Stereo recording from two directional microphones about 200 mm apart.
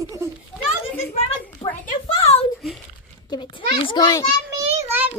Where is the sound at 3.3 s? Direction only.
25° left (ahead or behind).